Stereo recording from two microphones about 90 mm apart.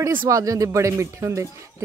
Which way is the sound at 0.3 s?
40° right (ahead or behind).